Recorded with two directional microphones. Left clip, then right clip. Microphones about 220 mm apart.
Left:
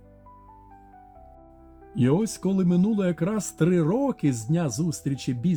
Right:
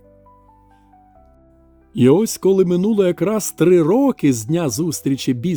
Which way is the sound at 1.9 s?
45° right (ahead or behind).